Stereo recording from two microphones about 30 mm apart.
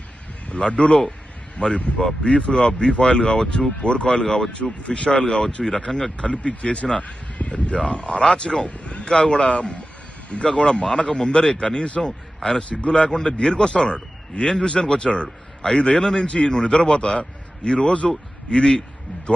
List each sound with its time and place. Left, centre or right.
0.7 s a man's voice: left
1.6 s a man's voice: left
3.4 s speech: centre
3.8 s a man's voice: left
5.1 s a man's voice: left
7.0 s a sound: left
7.8 s a man's voice: left
8.6 s a sound: left
9.1 s a man's voice: left
9.5 s a man's voice: left
10.8 s a man's voice: left
15.6 s a man's voice: left
16.2 s a man's voice: left